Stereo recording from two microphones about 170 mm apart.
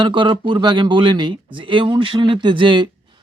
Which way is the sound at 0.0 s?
30° right (ahead or behind).